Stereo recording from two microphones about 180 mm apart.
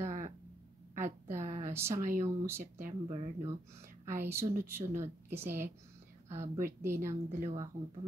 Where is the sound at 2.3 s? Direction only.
15° right (ahead or behind).